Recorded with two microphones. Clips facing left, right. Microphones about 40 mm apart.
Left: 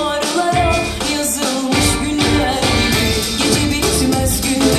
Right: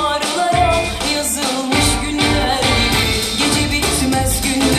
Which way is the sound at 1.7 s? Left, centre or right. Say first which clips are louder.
Left 1 dB; right.